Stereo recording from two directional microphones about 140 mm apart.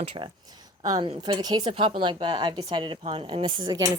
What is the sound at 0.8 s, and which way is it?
A woman's voice, 30° right (ahead or behind).